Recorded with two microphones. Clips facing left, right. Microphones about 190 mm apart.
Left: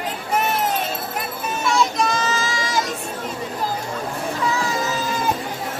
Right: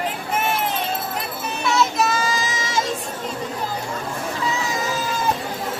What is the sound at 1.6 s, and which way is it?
Child singing, centre (ahead or behind).